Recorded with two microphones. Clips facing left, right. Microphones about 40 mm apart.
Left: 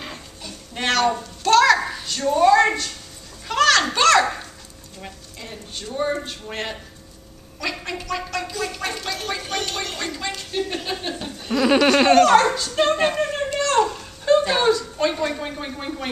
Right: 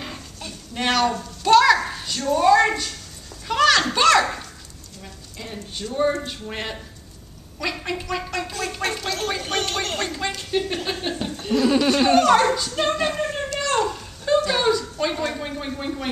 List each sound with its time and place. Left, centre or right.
0.7 s speech: centre
1.4 s a sound: centre
2.2 s speech: centre
3.4 s children playing: centre
5.4 s a woman's voice: centre
8.3 s a sound: right
9.4 s a sound: right
10.0 s a woman's voice: centre
11.5 s speech: left
12.2 s speech: centre
12.9 s speech: left
13.6 s a sound: centre
14.5 s speech: centre